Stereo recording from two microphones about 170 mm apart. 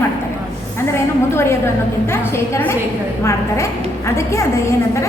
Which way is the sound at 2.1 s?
15° left (ahead or behind).